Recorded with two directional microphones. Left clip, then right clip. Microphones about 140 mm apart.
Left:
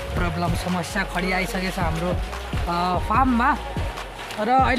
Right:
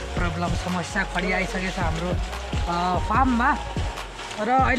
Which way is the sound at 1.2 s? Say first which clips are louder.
Left 2 dB; 20° left (ahead or behind).